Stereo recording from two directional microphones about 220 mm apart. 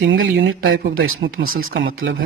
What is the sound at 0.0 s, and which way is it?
Speech, 55° right (ahead or behind).